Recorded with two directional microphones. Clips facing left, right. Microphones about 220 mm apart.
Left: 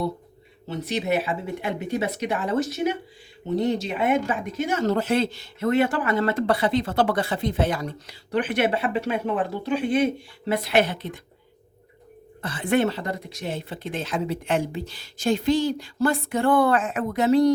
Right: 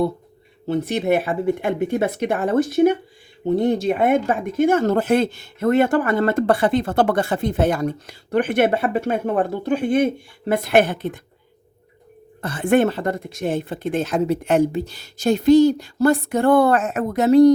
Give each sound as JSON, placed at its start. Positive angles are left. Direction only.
{"t": 0.7, "sound": "speech", "side_deg": -50}
{"t": 12.4, "sound": "speech", "side_deg": -45}